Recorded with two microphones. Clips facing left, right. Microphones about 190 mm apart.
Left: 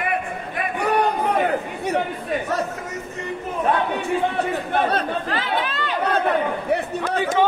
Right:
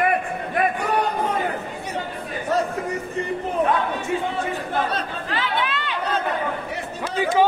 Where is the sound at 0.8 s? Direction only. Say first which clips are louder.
Left 2 dB; 60° left (ahead or behind).